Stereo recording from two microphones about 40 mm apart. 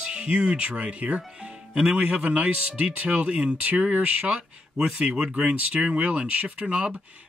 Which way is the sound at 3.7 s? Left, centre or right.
Right.